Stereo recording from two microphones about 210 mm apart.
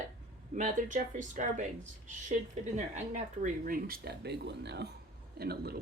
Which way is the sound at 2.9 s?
35° right (ahead or behind).